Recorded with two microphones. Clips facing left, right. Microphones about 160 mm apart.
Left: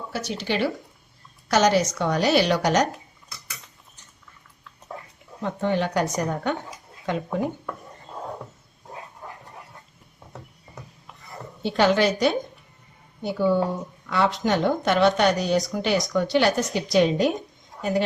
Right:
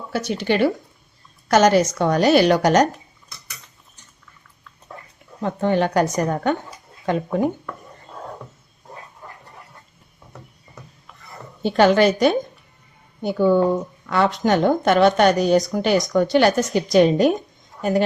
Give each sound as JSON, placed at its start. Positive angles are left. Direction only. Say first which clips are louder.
{"t": 0.1, "sound": "speech", "louder": "right 7 dB", "side_deg": -55}
{"t": 5.4, "sound": "speech", "louder": "right 4 dB", "side_deg": -50}
{"t": 10.3, "sound": "a sound", "louder": "left 1 dB", "side_deg": 20}
{"t": 11.6, "sound": "speech", "louder": "right 5 dB", "side_deg": -50}